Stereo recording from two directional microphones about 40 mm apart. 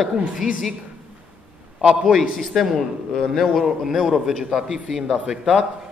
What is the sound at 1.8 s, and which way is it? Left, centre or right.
Speech, centre.